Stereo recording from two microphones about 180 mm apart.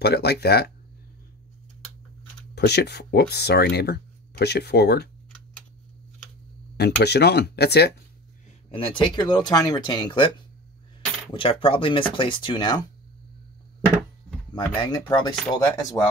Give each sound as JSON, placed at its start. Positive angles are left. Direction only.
{"t": 0.0, "sound": "speech", "side_deg": 65}
{"t": 2.5, "sound": "speech", "side_deg": 65}
{"t": 6.8, "sound": "speech", "side_deg": 65}
{"t": 8.6, "sound": "speech", "side_deg": 30}
{"t": 11.3, "sound": "speech", "side_deg": 30}
{"t": 14.8, "sound": "speech", "side_deg": 25}